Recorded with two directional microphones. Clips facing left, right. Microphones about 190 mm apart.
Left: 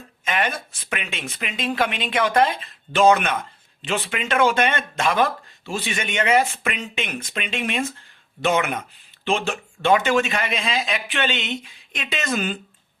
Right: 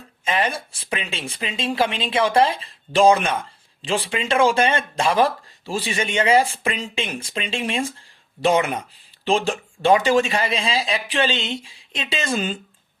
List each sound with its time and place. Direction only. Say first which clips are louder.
0.3 s speech: right 2 dB; 30° right (ahead or behind)